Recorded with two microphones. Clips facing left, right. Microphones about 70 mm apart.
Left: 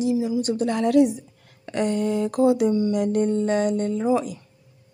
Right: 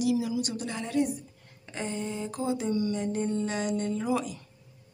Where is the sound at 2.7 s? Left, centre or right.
Left.